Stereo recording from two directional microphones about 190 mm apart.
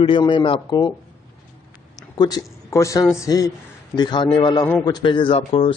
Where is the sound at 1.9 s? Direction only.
20° left (ahead or behind).